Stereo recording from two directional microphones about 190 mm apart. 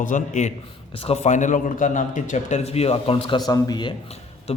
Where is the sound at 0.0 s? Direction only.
40° left (ahead or behind).